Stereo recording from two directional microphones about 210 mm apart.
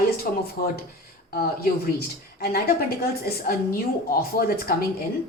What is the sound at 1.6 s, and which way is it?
Speech, 45° left (ahead or behind).